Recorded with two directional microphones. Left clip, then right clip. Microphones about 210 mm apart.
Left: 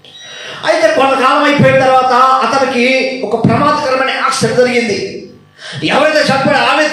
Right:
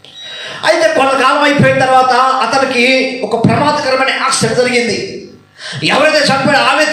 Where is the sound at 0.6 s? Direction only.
40° right (ahead or behind).